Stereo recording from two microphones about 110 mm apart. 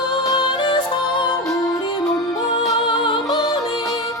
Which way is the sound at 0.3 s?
50° left (ahead or behind).